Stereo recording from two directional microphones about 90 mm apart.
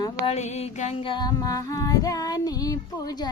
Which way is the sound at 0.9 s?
80° left.